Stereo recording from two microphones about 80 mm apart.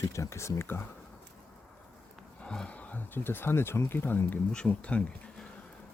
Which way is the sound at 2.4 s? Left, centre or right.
Centre.